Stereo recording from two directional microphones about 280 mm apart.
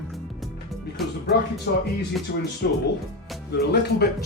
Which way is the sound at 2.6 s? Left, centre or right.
Left.